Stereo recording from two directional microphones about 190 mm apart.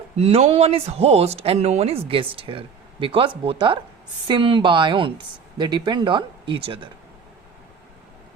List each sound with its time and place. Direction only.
0.2 s speech: 35° right (ahead or behind)